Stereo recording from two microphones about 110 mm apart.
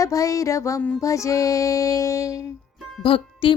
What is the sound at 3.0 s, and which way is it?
Speech, 55° left (ahead or behind).